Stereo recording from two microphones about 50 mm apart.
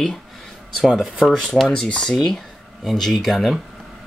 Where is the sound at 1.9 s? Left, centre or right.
Centre.